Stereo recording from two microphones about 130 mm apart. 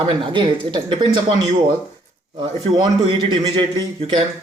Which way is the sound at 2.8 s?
35° right (ahead or behind).